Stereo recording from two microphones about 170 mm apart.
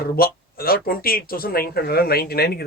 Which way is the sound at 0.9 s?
60° left (ahead or behind).